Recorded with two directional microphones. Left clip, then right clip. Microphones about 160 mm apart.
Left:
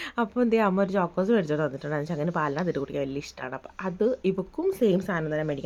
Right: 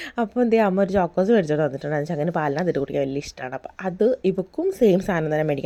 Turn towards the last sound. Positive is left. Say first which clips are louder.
# right 6 dB
turn(degrees=-40)  # may be behind; listen again after turning